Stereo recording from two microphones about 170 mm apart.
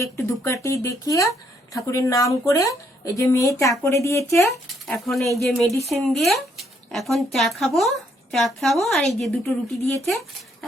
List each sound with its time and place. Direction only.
0.0 s speech: 15° left (ahead or behind)
4.7 s speech: centre (ahead or behind)